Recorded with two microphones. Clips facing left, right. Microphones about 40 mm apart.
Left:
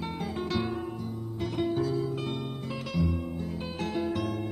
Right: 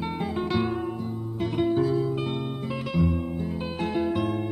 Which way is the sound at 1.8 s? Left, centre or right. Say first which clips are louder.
Right 5 dB; right.